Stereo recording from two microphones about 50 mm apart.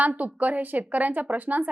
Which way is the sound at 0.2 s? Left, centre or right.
Right.